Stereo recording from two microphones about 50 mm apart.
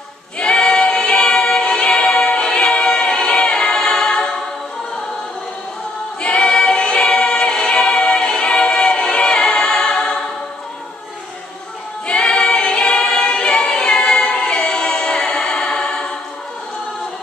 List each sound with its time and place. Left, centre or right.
0.4 s choir: centre
6.2 s a capella: centre
12.1 s choir: centre